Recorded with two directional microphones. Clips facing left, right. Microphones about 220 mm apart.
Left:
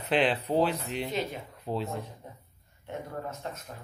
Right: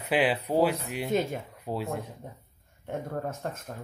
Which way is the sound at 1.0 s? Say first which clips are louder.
Right 8 dB; 50° right (ahead or behind).